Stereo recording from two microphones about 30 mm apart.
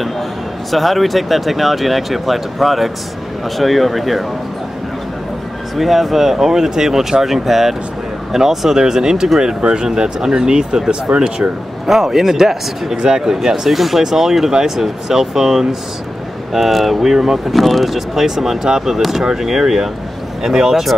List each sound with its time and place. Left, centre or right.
0.7 s speech: centre
5.8 s speech: centre; by 11.4 s right
11.8 s speech: centre
12.9 s speech: right
13.3 s speech: centre
13.7 s speech: centre
17.5 s speech: centre
17.9 s speech: centre